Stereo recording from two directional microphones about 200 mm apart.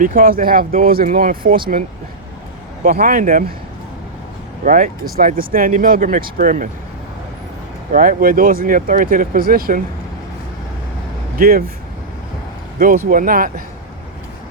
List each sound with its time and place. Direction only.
0.0 s speech: 45° right (ahead or behind)
2.8 s speech: 45° right (ahead or behind)
4.6 s speech: 40° right (ahead or behind)
7.9 s speech: 40° right (ahead or behind)
11.3 s speech: 45° right (ahead or behind)
13.1 s speech: 45° right (ahead or behind)